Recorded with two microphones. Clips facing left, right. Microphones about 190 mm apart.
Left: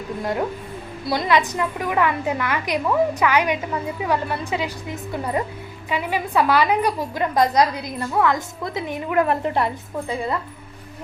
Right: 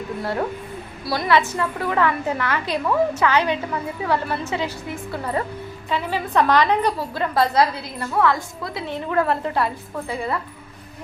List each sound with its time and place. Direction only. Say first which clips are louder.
0.2 s a woman's voice: left 1 dB; 15° left (ahead or behind)